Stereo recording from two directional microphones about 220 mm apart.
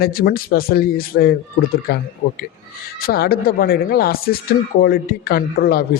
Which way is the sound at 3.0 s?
40° left (ahead or behind).